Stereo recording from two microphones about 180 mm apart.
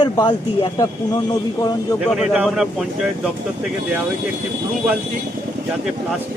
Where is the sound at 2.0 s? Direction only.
Centre (ahead or behind).